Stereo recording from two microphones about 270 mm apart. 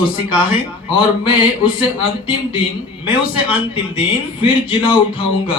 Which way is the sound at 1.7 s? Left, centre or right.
Centre.